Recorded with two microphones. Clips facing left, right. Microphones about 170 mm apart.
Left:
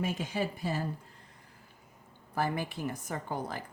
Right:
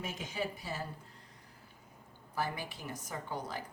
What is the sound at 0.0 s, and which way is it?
Speech, 60° left (ahead or behind).